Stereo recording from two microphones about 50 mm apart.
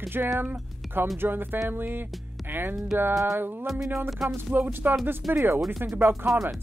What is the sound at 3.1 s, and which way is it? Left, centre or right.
Music, right.